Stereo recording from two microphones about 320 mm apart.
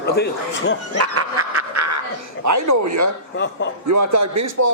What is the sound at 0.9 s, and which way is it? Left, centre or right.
Dog, right.